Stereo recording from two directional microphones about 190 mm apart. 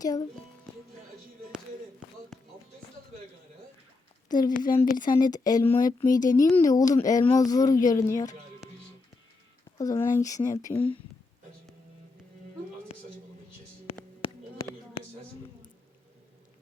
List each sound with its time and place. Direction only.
0.0 s speech: 20° left (ahead or behind)
2.3 s music: centre (ahead or behind)
4.3 s speech: 20° left (ahead or behind)
6.1 s speech: 45° left (ahead or behind)
6.4 s speech: 15° left (ahead or behind)
9.7 s speech: 15° left (ahead or behind)
14.2 s a sound: 30° left (ahead or behind)